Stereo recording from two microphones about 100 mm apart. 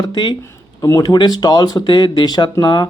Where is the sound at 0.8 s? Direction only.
40° left (ahead or behind).